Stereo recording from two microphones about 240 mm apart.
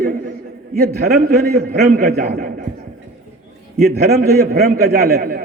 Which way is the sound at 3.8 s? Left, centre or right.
Right.